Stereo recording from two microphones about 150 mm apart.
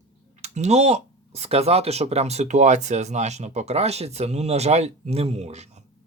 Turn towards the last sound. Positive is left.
turn(degrees=-45)  # may be behind; listen again after turning